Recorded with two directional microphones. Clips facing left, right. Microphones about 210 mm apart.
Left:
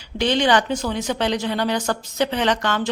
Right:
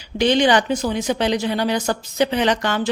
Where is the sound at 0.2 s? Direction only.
15° right (ahead or behind).